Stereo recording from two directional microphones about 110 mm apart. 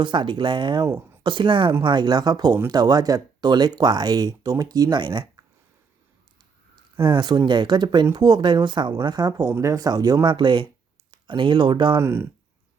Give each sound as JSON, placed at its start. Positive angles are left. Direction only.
{"t": 0.0, "sound": "speech", "side_deg": -45}
{"t": 0.8, "sound": "speech", "side_deg": -20}
{"t": 1.2, "sound": "speech", "side_deg": -45}
{"t": 6.7, "sound": "speech", "side_deg": -45}
{"t": 9.5, "sound": "speech", "side_deg": -25}
{"t": 11.9, "sound": "speech", "side_deg": -25}